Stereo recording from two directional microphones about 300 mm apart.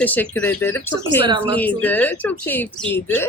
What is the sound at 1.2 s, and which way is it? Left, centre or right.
Speech, centre.